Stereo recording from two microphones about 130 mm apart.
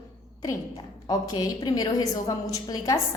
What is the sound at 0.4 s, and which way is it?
A woman's voice, 30° left (ahead or behind).